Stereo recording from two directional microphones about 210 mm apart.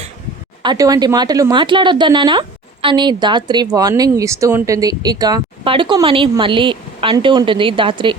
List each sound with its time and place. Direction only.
0.6 s speech: 20° right (ahead or behind)